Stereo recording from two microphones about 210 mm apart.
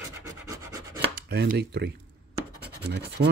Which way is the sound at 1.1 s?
50° right (ahead or behind).